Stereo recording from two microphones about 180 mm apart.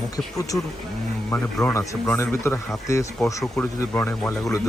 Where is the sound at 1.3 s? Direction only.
10° left (ahead or behind).